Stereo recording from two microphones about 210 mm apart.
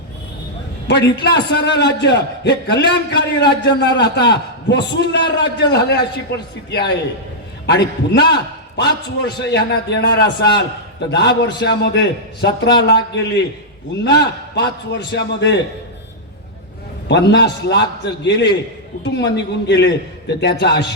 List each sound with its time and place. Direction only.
0.9 s a man's voice: 55° left (ahead or behind)
17.1 s a man's voice: 55° left (ahead or behind)